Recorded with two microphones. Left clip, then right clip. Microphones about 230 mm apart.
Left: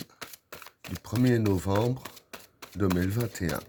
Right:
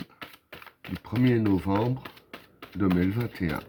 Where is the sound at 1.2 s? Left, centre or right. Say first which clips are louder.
Right 1 dB; left.